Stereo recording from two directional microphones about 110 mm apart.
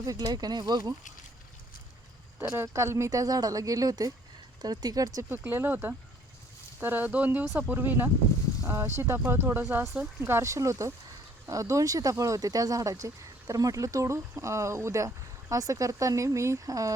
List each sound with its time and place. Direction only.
0.0 s speech: 35° right (ahead or behind)
2.4 s speech: 25° right (ahead or behind)
5.3 s speech: 20° right (ahead or behind)